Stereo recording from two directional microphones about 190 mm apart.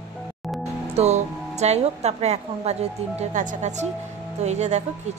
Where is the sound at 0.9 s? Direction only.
35° right (ahead or behind).